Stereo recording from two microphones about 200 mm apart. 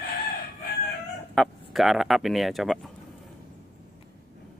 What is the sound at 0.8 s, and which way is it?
Chicken, centre (ahead or behind).